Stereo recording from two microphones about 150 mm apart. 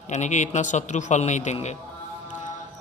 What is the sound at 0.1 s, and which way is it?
A man's voice, 50° left (ahead or behind).